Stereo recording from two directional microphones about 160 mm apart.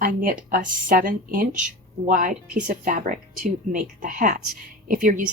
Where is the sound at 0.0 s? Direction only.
60° right (ahead or behind).